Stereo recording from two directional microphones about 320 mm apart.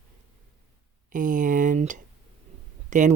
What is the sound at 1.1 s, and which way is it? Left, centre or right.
Speech, right.